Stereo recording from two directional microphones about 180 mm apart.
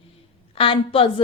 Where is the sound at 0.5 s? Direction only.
30° left (ahead or behind).